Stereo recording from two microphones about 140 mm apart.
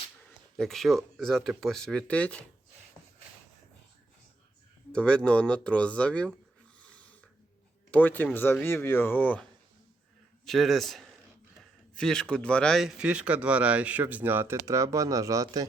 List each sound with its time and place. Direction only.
0.5 s speech: centre (ahead or behind)
4.9 s speech: 5° left (ahead or behind)
6.9 s snoring: 10° left (ahead or behind)
7.9 s speech: 10° left (ahead or behind); by 15.6 s 25° right (ahead or behind)